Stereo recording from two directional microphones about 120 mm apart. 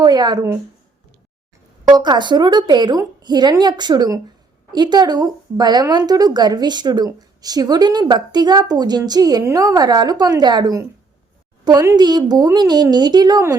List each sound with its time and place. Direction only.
0.0 s a woman's voice: 35° right (ahead or behind)
1.8 s a woman's voice: 35° right (ahead or behind)